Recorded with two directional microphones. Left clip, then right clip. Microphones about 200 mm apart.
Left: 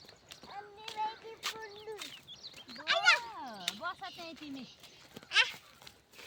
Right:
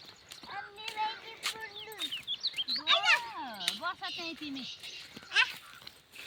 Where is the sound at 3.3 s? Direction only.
55° left (ahead or behind).